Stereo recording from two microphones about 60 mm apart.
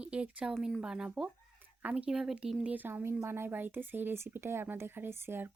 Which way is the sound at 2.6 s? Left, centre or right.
Right.